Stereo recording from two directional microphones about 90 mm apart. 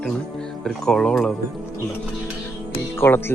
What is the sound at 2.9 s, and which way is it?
Music, 25° left (ahead or behind).